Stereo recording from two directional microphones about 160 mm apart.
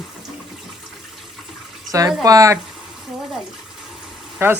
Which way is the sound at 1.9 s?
20° right (ahead or behind).